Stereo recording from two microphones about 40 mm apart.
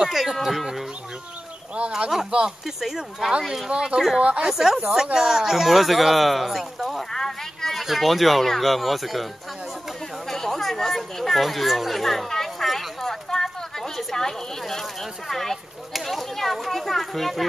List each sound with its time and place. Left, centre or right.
0.0 s speech: centre
2.6 s speech: centre
3.7 s speech: right
4.4 s speech: centre
7.1 s a sound: centre
7.8 s speech: centre
10.2 s chatter: centre
12.6 s a sound: centre
15.9 s children playing: centre